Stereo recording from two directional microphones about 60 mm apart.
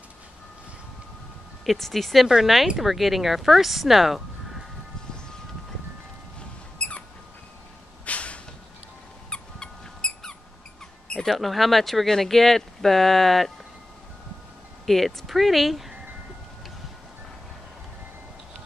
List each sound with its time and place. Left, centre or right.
1.7 s speech: centre
6.8 s rodents: left
8.0 s a sound: left
9.3 s squeak: centre
11.2 s speech: centre
14.9 s speech: centre